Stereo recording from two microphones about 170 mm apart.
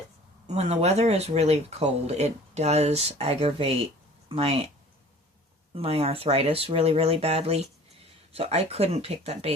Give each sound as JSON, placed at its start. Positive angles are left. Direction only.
{"t": 0.4, "sound": "speech", "side_deg": -40}
{"t": 5.7, "sound": "speech", "side_deg": -35}